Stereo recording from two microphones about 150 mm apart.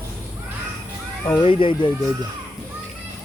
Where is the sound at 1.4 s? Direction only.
35° left (ahead or behind).